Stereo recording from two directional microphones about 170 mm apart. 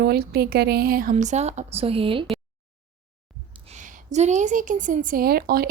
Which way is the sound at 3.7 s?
45° right (ahead or behind).